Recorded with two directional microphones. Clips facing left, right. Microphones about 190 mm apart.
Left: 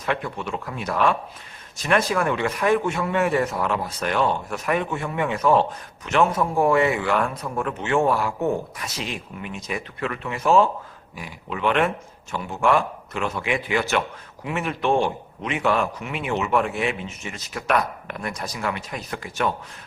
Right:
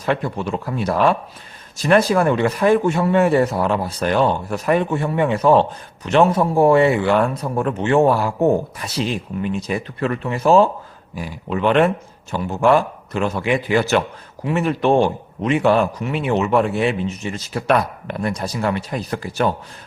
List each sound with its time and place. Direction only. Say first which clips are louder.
0.0 s a man's voice: right 5 dB; 35° right (ahead or behind)